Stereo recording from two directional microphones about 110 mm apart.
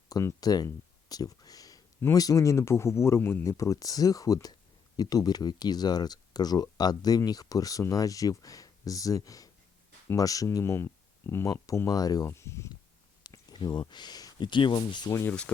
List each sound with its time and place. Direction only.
0.1 s speech: 30° left (ahead or behind)
3.6 s speech: 30° left (ahead or behind)
13.2 s speech: 40° left (ahead or behind)
15.3 s speech: 10° left (ahead or behind)